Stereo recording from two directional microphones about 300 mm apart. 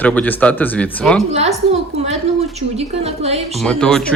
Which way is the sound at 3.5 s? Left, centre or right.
Centre.